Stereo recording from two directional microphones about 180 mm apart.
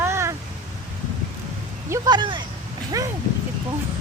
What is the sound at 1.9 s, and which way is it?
Speech, 25° right (ahead or behind).